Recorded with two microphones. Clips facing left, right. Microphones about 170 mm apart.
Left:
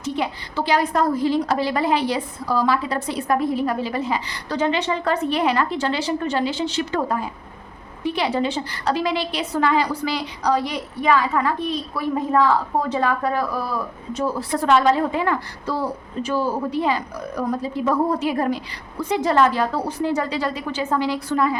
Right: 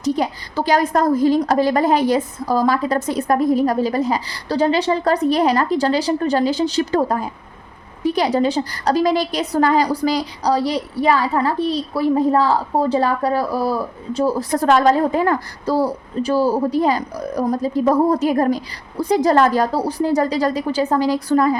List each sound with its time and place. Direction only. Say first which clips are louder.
0.0 s a woman's voice: right 5 dB; 40° right (ahead or behind)